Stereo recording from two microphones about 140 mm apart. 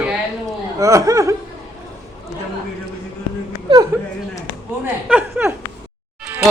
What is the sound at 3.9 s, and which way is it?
Speech, 15° right (ahead or behind).